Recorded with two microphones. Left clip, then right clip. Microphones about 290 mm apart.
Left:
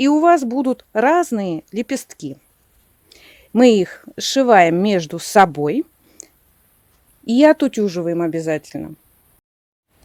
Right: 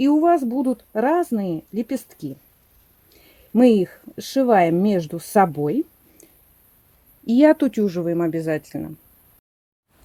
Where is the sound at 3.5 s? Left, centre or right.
Left.